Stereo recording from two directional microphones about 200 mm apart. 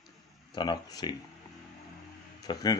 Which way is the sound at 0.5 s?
20° left (ahead or behind).